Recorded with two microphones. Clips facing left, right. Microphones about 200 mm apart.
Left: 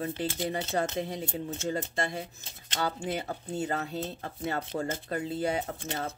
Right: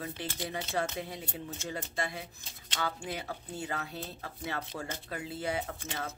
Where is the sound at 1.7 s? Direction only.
45° left (ahead or behind).